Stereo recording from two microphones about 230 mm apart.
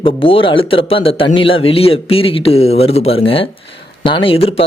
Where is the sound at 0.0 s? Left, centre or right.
Left.